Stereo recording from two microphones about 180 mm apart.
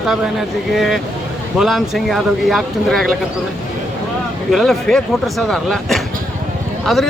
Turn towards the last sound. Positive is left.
turn(degrees=0)  # may be behind; listen again after turning